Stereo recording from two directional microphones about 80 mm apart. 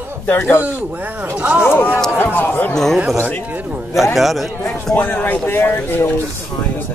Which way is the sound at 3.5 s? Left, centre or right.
Centre.